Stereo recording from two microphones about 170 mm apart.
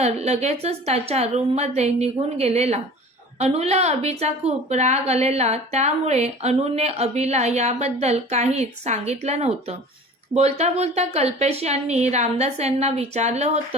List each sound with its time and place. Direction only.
0.0 s a woman's voice: 40° right (ahead or behind)